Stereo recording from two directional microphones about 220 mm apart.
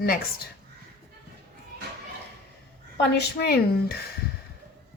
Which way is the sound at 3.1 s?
45° left (ahead or behind).